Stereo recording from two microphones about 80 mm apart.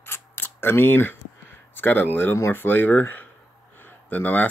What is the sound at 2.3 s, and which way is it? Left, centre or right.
Speech, left.